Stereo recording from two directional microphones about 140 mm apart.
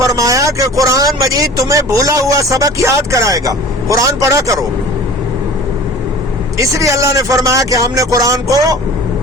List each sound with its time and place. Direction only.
0.0 s speech: 25° right (ahead or behind)
6.6 s speech: 25° right (ahead or behind)